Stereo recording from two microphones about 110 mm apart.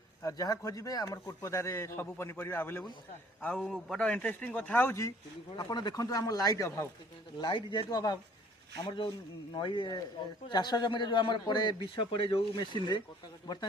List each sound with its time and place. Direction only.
0.2 s a man's voice: 30° left (ahead or behind)
3.4 s a man's voice: 5° left (ahead or behind); by 5.1 s 25° left (ahead or behind)
5.5 s a man's voice: 40° left (ahead or behind)
7.4 s a man's voice: 45° left (ahead or behind)
8.8 s a man's voice: 45° left (ahead or behind)
11.9 s speech: 55° left (ahead or behind)
12.5 s speech: 45° left (ahead or behind)